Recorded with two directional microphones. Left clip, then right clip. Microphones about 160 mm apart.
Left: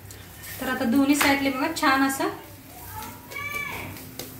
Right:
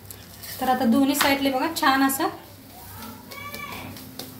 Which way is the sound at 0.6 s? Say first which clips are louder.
Right 3 dB; 90° right.